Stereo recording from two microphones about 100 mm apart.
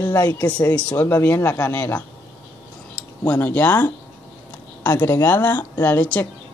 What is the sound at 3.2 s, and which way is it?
Speech, 15° left (ahead or behind).